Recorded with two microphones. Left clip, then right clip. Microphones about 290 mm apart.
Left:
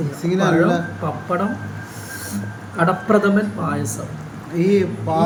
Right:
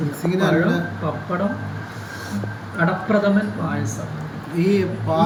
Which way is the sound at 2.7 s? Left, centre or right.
Centre.